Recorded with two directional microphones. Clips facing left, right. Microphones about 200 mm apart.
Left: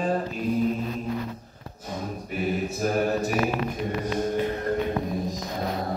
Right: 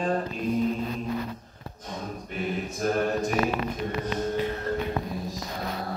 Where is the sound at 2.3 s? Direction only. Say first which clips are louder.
Left 4 dB; 5° left (ahead or behind).